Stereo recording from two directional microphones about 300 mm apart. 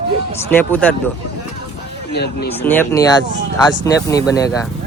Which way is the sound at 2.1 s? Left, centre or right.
Left.